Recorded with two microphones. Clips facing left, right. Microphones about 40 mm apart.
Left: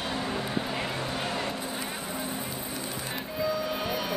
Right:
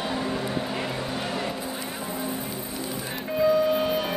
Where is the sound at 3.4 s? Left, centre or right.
Centre.